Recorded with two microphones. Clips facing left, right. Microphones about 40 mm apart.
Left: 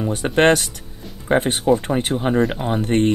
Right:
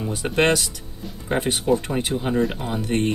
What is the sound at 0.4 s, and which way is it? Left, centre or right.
Speech, left.